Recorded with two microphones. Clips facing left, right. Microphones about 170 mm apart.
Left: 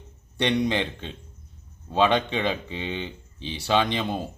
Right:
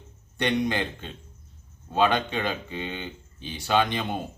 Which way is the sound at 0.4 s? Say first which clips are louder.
Left 2 dB; 25° left (ahead or behind).